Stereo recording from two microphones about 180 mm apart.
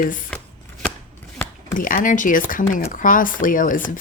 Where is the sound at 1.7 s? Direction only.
50° left (ahead or behind).